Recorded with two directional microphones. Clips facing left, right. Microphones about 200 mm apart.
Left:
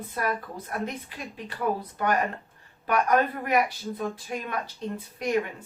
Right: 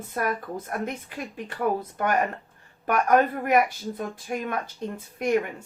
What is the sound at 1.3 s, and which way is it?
Speech, 50° right (ahead or behind).